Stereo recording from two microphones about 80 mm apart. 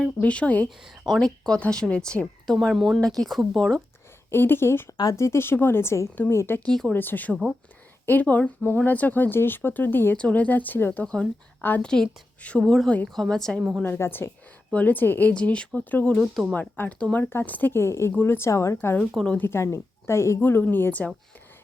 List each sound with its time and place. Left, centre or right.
0.2 s speech: centre
1.1 s speech: centre
4.3 s a woman's voice: left
6.7 s speech: centre
6.9 s speech: left
11.0 s speech: centre
13.1 s speech: centre
13.8 s speech: left
15.3 s speech: centre
16.2 s speech: centre
16.6 s a woman's voice: left
19.1 s speech: centre
19.4 s a woman's voice: left